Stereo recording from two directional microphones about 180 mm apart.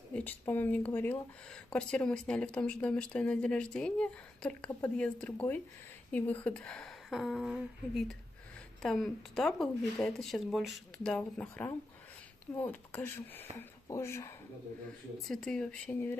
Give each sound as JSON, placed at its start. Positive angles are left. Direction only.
{"t": 0.1, "sound": "speech", "side_deg": 10}
{"t": 15.2, "sound": "speech", "side_deg": 5}